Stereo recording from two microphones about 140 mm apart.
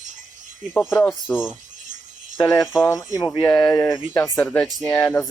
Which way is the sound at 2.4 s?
25° left (ahead or behind).